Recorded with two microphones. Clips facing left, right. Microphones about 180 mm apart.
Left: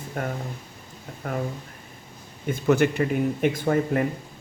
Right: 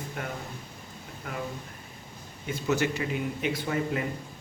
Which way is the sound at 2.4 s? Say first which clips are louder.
Left 7 dB; 55° left (ahead or behind).